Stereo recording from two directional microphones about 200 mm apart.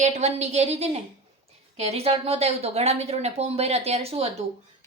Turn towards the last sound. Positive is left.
turn(degrees=-30)  # may be behind; listen again after turning